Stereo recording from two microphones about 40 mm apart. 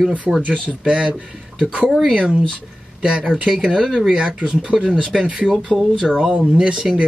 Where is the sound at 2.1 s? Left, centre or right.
Right.